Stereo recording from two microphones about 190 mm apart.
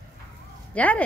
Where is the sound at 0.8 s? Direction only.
5° left (ahead or behind).